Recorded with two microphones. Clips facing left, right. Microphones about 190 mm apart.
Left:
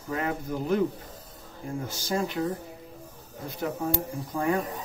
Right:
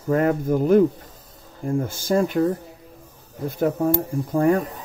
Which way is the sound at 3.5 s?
55° right (ahead or behind).